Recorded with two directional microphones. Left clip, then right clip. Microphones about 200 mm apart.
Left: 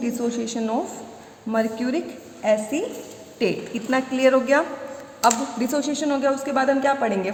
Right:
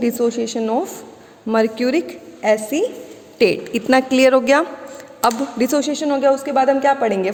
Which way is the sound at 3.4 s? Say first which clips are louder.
Right 8 dB; 50° right (ahead or behind).